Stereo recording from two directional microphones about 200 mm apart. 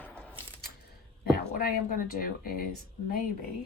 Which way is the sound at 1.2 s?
50° left (ahead or behind).